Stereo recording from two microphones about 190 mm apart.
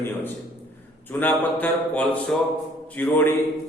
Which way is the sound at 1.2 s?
10° left (ahead or behind).